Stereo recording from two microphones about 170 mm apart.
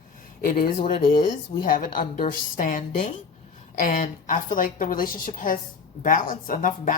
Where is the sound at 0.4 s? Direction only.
55° left (ahead or behind).